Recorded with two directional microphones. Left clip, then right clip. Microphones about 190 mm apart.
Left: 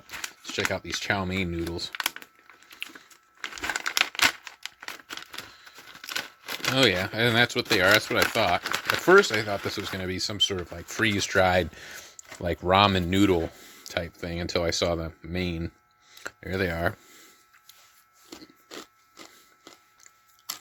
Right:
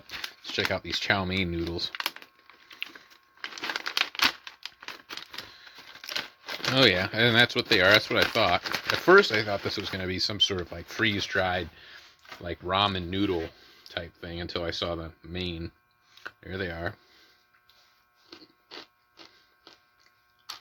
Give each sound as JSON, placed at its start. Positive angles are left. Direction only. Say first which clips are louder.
{"t": 0.2, "sound": "speech", "louder": "even", "side_deg": 0}
{"t": 2.0, "sound": "typing", "louder": "left 2 dB", "side_deg": 10}
{"t": 3.4, "sound": "crumpling", "louder": "left 3 dB", "side_deg": 10}
{"t": 6.0, "sound": "speech", "louder": "left 1 dB", "side_deg": 5}
{"t": 11.2, "sound": "speech", "louder": "left 5 dB", "side_deg": 25}
{"t": 18.3, "sound": "a sound", "louder": "left 3 dB", "side_deg": 45}